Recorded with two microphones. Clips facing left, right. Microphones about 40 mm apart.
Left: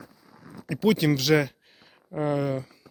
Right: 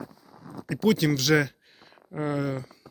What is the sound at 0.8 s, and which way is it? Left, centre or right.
Speech, centre.